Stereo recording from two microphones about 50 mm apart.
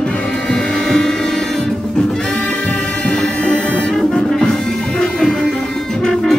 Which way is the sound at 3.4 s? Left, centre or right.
Left.